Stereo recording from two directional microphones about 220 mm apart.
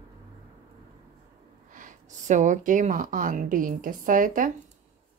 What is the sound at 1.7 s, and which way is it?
Speech, 35° right (ahead or behind).